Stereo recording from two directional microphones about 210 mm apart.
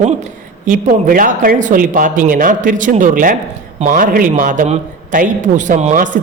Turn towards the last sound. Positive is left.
turn(degrees=-40)  # may be behind; listen again after turning